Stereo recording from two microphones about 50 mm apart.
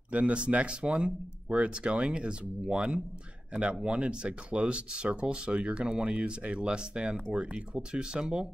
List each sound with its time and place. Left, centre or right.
0.1 s speech: right